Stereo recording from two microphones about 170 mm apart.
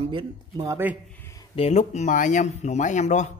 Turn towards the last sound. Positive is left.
turn(degrees=40)  # may be behind; listen again after turning